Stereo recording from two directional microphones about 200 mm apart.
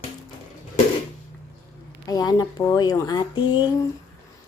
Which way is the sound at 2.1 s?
20° left (ahead or behind).